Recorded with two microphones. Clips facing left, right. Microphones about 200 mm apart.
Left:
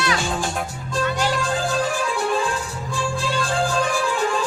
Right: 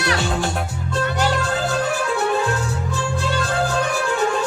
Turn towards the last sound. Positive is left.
turn(degrees=-65)  # may be behind; listen again after turning